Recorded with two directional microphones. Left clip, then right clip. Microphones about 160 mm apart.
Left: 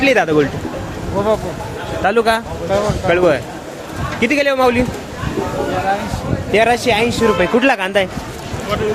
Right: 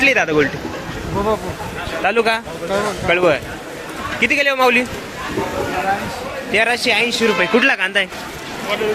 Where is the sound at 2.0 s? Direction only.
15° left (ahead or behind).